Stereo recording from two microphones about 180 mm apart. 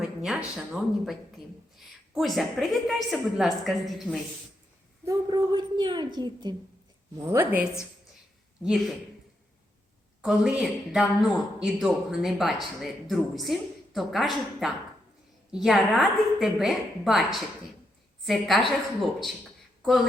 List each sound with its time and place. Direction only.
0.2 s speech: 5° right (ahead or behind)
2.1 s speech: centre (ahead or behind)
5.0 s a woman's voice: 20° right (ahead or behind)
7.3 s a woman's voice: 10° right (ahead or behind)
10.2 s speech: 5° right (ahead or behind)
19.8 s speech: centre (ahead or behind)